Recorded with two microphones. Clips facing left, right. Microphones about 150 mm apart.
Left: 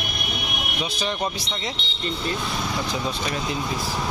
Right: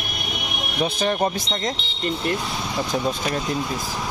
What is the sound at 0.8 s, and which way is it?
Speech, 55° right (ahead or behind).